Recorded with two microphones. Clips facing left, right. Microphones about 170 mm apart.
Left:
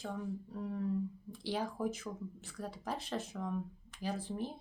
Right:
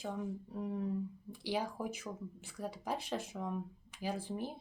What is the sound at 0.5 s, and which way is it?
Speech, 15° right (ahead or behind).